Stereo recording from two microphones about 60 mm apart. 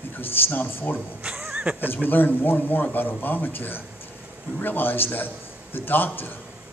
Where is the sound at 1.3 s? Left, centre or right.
Centre.